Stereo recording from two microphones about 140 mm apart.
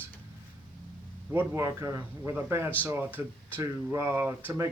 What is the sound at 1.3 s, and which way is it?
Speech, 20° right (ahead or behind).